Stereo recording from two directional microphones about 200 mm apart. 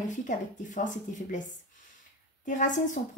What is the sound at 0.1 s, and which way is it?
Speech, 40° left (ahead or behind).